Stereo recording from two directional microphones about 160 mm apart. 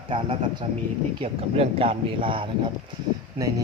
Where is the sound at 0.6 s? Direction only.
35° right (ahead or behind).